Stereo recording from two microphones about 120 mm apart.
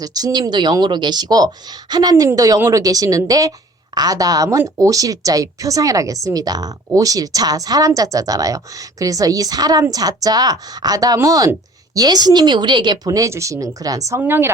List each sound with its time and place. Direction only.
0.0 s a woman's voice: 30° right (ahead or behind)
14.2 s a woman's voice: 20° right (ahead or behind)